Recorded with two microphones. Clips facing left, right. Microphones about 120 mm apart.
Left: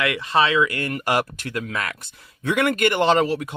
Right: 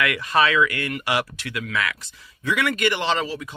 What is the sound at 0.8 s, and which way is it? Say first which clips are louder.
Speech: left 2 dB; 40° left (ahead or behind).